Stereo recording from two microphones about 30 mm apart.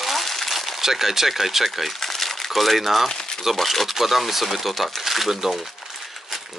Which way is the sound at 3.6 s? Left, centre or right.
Centre.